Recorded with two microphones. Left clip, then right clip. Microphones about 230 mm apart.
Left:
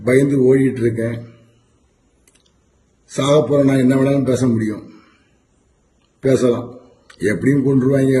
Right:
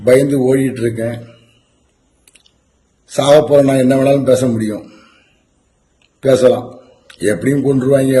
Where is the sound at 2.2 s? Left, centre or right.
Centre.